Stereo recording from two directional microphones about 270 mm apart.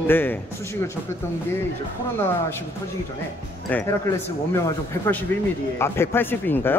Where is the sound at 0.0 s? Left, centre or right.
Centre.